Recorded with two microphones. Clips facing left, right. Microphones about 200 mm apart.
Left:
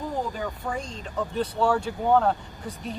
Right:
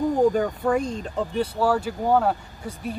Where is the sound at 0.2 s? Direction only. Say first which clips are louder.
Right 11 dB; 50° right (ahead or behind).